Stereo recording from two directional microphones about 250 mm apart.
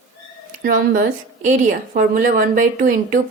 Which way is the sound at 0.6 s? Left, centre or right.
Right.